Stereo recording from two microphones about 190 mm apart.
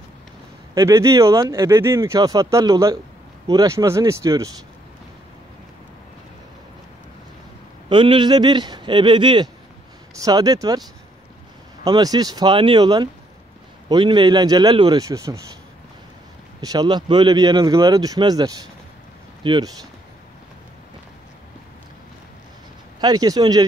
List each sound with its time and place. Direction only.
0.7 s speech: 15° right (ahead or behind)
7.9 s speech: 25° right (ahead or behind)
11.8 s speech: 20° right (ahead or behind)
16.6 s speech: 20° right (ahead or behind)
22.9 s speech: 20° right (ahead or behind)